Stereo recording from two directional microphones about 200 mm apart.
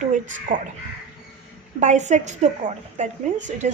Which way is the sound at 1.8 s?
35° right (ahead or behind).